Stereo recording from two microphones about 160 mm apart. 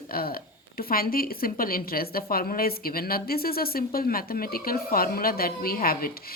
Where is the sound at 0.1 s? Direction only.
70° left (ahead or behind).